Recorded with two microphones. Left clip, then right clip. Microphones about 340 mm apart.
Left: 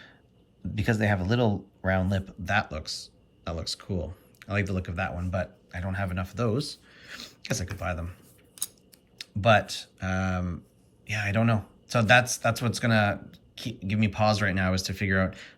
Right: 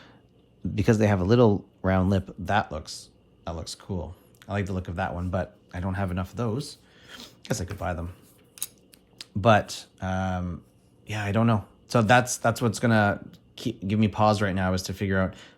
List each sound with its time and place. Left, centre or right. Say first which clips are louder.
0.7 s speech: right 4 dB; centre
9.1 s speech: right 1 dB; centre